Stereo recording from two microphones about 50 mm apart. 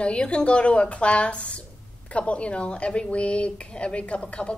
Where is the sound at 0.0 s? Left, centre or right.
Left.